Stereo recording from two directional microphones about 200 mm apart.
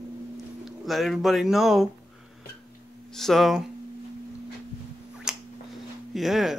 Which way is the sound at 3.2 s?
Centre (ahead or behind).